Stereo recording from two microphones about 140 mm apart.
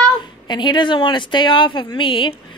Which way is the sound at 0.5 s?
35° left (ahead or behind).